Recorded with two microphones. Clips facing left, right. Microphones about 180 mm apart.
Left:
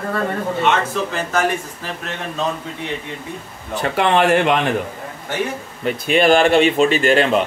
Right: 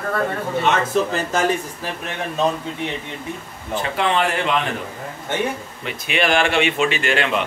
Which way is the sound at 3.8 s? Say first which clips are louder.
Left 4 dB; 55° left (ahead or behind).